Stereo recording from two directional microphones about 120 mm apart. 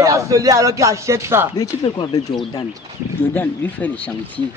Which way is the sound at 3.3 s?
15° left (ahead or behind).